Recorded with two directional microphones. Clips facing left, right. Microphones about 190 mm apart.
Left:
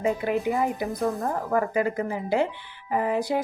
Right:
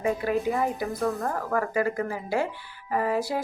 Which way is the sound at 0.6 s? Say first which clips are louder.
Left 1 dB; 20° left (ahead or behind).